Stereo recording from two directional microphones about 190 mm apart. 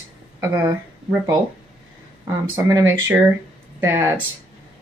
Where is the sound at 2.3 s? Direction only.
15° right (ahead or behind).